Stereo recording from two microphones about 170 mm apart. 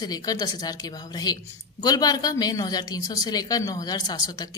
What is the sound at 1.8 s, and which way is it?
Speech, 25° left (ahead or behind).